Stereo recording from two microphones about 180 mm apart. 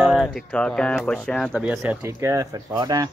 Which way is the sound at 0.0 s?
Centre (ahead or behind).